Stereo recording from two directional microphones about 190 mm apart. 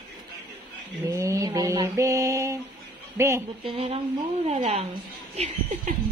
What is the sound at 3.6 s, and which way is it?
Speech, 30° right (ahead or behind).